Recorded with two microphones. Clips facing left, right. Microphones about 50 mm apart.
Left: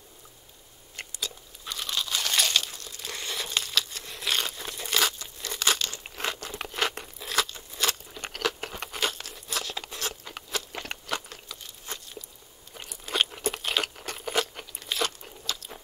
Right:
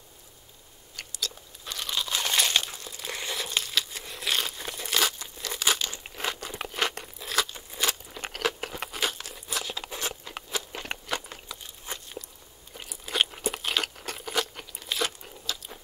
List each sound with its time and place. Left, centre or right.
1.7 s crunch: centre
2.0 s crumpling: centre
2.5 s crunch: centre
3.3 s crumpling: centre
5.4 s crunch: centre
6.0 s a sound: centre
7.5 s crunch: centre
9.8 s a sound: centre
10.3 s crunch: centre
12.7 s a sound: centre